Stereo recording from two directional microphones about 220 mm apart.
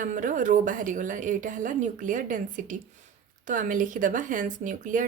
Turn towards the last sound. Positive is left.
turn(degrees=-35)  # may be behind; listen again after turning